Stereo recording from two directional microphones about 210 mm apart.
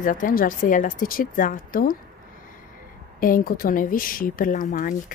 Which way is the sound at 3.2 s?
40° left (ahead or behind).